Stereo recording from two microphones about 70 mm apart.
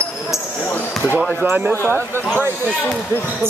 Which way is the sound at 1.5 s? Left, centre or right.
Right.